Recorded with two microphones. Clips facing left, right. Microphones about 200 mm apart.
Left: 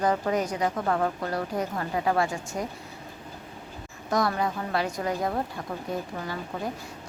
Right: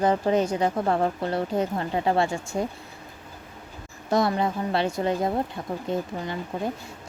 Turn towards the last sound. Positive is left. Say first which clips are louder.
# right 3 dB
turn(degrees=-20)  # may be behind; listen again after turning